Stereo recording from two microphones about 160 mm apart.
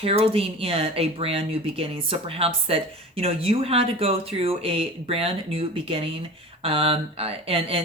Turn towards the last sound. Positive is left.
turn(degrees=-35)  # may be behind; listen again after turning